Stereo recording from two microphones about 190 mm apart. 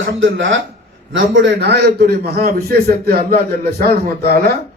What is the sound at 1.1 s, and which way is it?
A man's voice, 65° right (ahead or behind).